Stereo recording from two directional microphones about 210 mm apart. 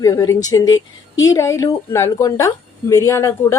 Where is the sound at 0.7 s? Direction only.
70° left (ahead or behind).